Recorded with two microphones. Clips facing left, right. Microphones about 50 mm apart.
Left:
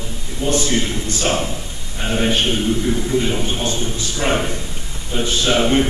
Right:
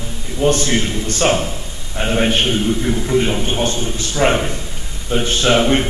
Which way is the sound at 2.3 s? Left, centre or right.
Right.